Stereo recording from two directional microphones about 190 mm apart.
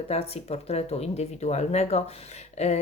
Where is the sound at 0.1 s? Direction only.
30° left (ahead or behind).